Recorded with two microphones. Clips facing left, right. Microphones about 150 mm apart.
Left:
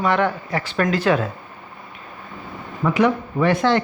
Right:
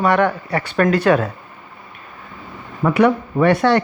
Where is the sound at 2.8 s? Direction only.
60° right (ahead or behind).